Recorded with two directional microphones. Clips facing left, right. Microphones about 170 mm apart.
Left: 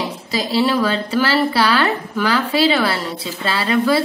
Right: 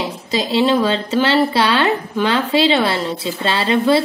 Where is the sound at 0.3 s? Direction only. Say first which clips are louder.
Right 2 dB; 25° right (ahead or behind).